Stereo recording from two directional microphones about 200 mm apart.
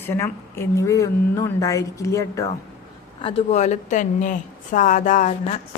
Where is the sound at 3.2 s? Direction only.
30° left (ahead or behind).